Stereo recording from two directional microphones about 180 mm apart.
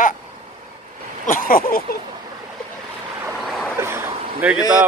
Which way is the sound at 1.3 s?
50° left (ahead or behind).